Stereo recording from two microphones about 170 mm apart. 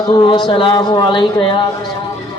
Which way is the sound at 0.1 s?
25° left (ahead or behind).